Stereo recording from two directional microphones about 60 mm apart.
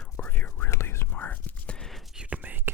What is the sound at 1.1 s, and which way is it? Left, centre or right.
Whispering, left.